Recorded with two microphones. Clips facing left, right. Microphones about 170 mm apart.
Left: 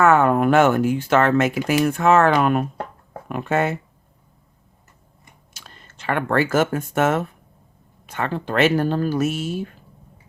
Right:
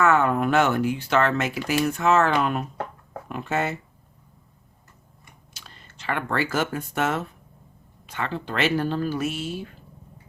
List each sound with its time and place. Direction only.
0.0 s speech: 50° left (ahead or behind)
5.5 s speech: 50° left (ahead or behind)